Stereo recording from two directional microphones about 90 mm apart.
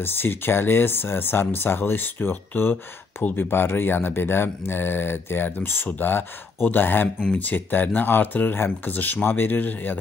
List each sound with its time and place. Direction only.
0.0 s speech: 25° left (ahead or behind)
7.2 s speech: 10° left (ahead or behind)
7.4 s speech: 20° left (ahead or behind)